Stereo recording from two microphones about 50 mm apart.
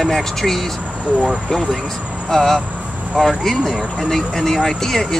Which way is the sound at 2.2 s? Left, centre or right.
Centre.